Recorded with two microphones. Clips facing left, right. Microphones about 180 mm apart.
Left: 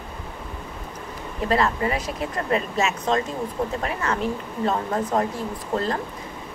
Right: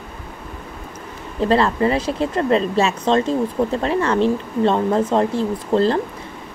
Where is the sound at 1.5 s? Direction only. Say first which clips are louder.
Right 5 dB; 30° right (ahead or behind).